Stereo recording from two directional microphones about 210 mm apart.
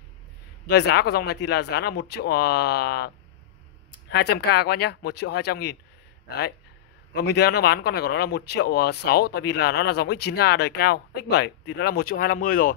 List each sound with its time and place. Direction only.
0.7 s speech: 50° left (ahead or behind)
4.1 s speech: 50° left (ahead or behind)